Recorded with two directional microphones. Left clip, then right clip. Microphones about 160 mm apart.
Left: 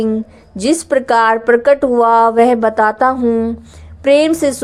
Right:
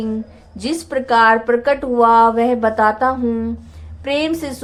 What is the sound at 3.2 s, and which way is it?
Speech, 25° left (ahead or behind).